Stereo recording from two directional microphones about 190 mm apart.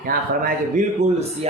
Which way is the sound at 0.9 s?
35° right (ahead or behind).